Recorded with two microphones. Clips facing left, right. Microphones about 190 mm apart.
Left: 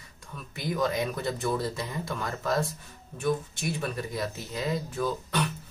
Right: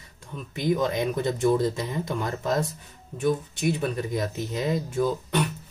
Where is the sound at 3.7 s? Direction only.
15° right (ahead or behind).